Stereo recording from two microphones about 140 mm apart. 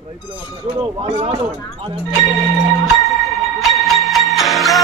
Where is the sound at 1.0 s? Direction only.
50° right (ahead or behind).